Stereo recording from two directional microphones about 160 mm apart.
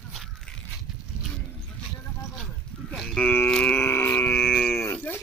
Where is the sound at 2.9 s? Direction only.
5° left (ahead or behind).